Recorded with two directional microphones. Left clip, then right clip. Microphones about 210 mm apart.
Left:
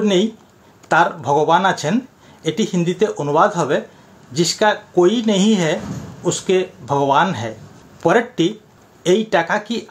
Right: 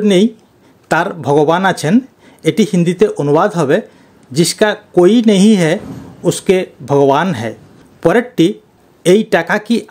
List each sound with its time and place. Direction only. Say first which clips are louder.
0.0 s speech: right 5 dB; 45° right (ahead or behind)